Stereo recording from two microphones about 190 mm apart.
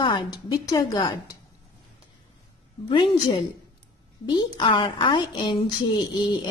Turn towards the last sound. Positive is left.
turn(degrees=25)  # may be behind; listen again after turning